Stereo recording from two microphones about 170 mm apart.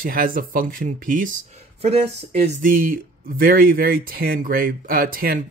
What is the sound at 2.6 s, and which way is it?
Speech, 55° right (ahead or behind).